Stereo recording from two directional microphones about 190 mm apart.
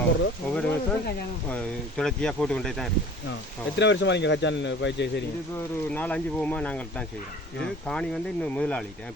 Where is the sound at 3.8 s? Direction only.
70° left (ahead or behind).